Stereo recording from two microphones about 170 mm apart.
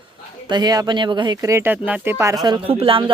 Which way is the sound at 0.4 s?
25° right (ahead or behind).